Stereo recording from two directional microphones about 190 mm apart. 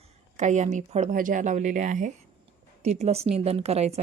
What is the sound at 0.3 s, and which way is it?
Speech, 40° right (ahead or behind).